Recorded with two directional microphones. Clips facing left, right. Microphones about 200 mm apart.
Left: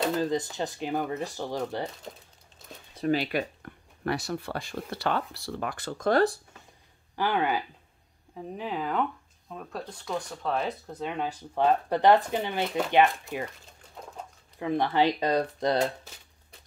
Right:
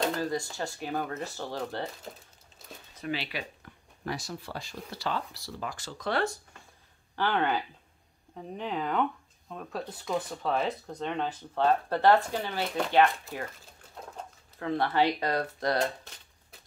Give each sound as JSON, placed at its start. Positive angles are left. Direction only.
{"t": 0.2, "sound": "speech", "side_deg": 20}
{"t": 2.9, "sound": "a sound", "side_deg": 35}
{"t": 3.2, "sound": "speech", "side_deg": 50}
{"t": 7.2, "sound": "speech", "side_deg": 10}
{"t": 14.6, "sound": "speech", "side_deg": 15}
{"t": 15.8, "sound": "speech", "side_deg": 5}